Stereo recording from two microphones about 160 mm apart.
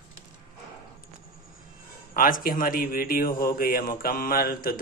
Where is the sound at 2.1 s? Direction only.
60° left (ahead or behind).